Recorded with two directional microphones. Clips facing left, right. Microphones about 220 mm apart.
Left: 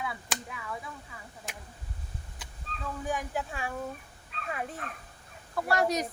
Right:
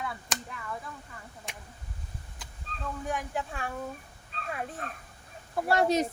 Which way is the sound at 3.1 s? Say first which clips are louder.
Left 1 dB; centre (ahead or behind).